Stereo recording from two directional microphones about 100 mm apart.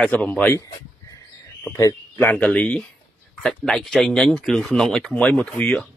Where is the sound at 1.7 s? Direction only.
25° left (ahead or behind).